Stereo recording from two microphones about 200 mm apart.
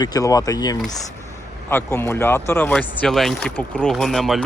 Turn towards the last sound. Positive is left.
turn(degrees=0)  # may be behind; listen again after turning